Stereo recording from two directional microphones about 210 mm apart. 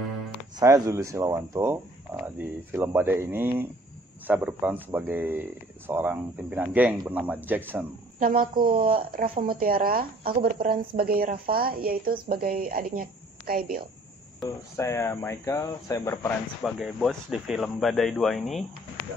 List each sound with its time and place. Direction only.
0.6 s speech: 15° right (ahead or behind)
8.2 s a woman's voice: 40° right (ahead or behind)
14.8 s speech: 15° left (ahead or behind)
16.6 s speech: centre (ahead or behind)